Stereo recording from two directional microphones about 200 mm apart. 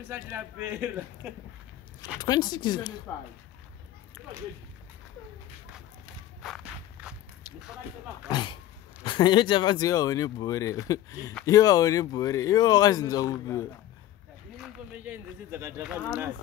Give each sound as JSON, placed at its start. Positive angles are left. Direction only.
{"t": 0.1, "sound": "speech", "side_deg": -10}
{"t": 2.1, "sound": "speech", "side_deg": 20}
{"t": 3.1, "sound": "speech", "side_deg": 10}
{"t": 6.4, "sound": "walk", "side_deg": -5}
{"t": 8.3, "sound": "speech", "side_deg": 25}
{"t": 14.6, "sound": "speech", "side_deg": -10}